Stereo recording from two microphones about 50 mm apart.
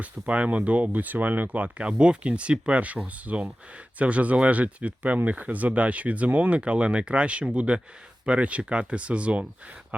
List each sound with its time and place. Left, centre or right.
0.0 s speech: right